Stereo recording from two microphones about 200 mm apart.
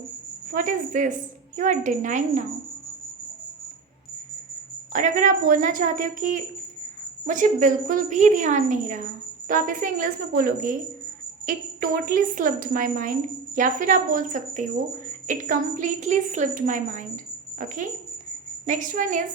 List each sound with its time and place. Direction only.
0.5 s a woman's voice: 40° right (ahead or behind)
4.9 s a woman's voice: 40° right (ahead or behind)
18.6 s a woman's voice: 40° right (ahead or behind)